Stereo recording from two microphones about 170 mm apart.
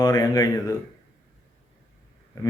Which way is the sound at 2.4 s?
20° left (ahead or behind).